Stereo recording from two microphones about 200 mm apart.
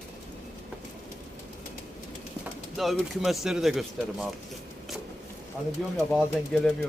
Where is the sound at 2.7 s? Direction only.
Centre (ahead or behind).